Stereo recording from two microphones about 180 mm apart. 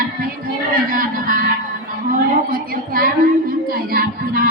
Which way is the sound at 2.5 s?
50° right (ahead or behind).